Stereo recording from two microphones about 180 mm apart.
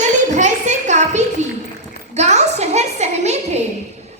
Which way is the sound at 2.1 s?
40° right (ahead or behind).